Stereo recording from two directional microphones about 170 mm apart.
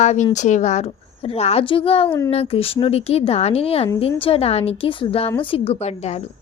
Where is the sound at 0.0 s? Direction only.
40° left (ahead or behind).